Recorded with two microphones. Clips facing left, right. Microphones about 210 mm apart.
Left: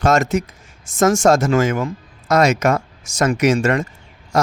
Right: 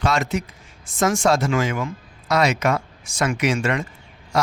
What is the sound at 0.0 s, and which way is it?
Speech, 45° left (ahead or behind).